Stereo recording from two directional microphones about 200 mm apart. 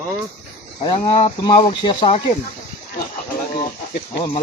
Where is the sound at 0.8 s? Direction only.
25° left (ahead or behind).